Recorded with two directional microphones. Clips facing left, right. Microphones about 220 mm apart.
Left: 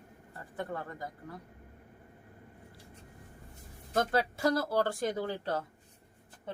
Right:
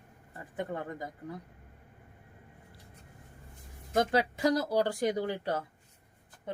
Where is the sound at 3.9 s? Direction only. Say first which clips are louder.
Right 2 dB; 15° right (ahead or behind).